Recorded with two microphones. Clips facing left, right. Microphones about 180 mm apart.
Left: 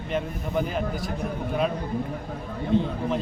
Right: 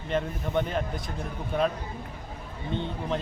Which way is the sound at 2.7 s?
5° left (ahead or behind).